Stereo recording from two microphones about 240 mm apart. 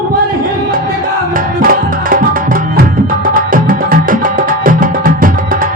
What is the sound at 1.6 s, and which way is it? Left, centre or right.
Music, right.